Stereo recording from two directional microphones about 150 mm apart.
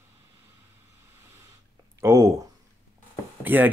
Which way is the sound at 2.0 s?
20° right (ahead or behind).